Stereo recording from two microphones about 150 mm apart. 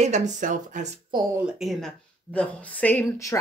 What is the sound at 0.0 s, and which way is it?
Speech, 50° right (ahead or behind).